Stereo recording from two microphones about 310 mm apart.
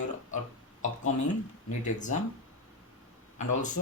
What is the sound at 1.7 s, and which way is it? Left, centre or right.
Speech, left.